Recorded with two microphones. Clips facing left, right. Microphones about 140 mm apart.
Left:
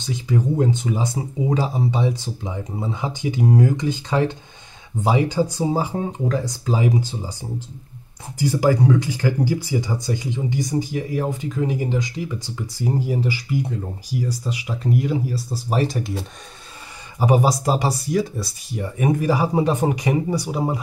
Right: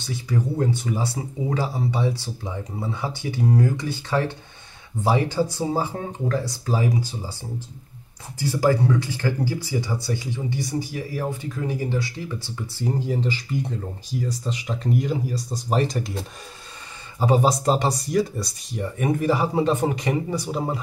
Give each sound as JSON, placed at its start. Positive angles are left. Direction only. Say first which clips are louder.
{"t": 0.0, "sound": "speech", "louder": "left 3 dB", "side_deg": 20}
{"t": 8.4, "sound": "speech", "louder": "left 2 dB", "side_deg": 15}